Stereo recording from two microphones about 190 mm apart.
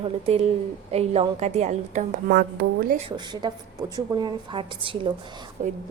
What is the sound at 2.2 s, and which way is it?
Speech, 55° right (ahead or behind).